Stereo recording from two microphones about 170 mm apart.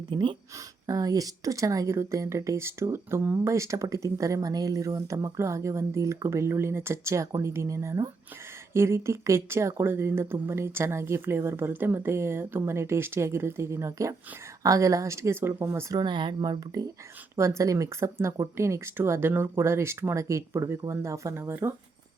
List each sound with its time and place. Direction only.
0.1 s speech: 30° right (ahead or behind)